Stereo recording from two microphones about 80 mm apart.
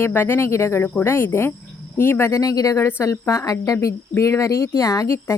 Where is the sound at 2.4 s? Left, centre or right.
Left.